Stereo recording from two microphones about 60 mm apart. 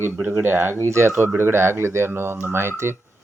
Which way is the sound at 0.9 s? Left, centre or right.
Right.